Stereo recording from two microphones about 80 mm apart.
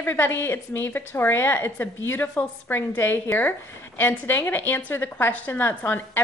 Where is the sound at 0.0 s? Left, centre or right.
Left.